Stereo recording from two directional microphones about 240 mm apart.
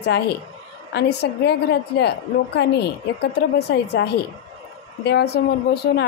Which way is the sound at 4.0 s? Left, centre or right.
Left.